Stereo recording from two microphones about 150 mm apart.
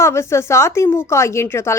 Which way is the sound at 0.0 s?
20° left (ahead or behind).